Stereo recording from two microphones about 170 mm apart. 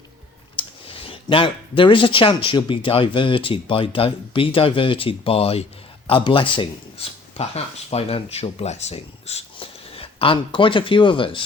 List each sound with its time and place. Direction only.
0.5 s speech: 35° left (ahead or behind)